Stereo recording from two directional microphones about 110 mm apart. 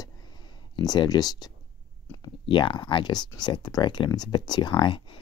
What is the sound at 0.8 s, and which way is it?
Speech, 35° left (ahead or behind).